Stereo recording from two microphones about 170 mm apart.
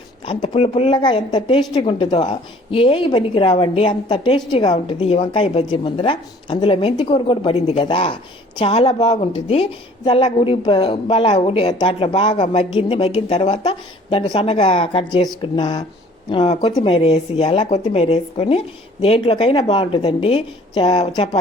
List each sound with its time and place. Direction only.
0.4 s speech: 35° left (ahead or behind)